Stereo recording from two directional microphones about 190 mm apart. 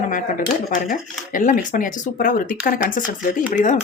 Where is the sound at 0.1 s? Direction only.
45° left (ahead or behind).